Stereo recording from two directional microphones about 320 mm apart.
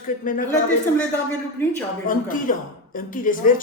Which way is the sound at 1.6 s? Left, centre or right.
Centre.